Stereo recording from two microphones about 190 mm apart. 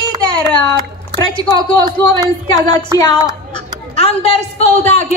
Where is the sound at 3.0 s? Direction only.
25° left (ahead or behind).